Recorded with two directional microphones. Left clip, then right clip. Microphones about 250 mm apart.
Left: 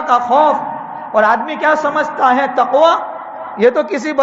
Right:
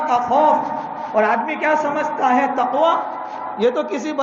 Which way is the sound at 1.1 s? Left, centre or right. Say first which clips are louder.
Left 5 dB; left.